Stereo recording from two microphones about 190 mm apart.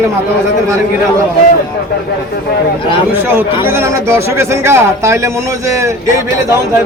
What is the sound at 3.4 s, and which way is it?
A man's voice, 10° right (ahead or behind).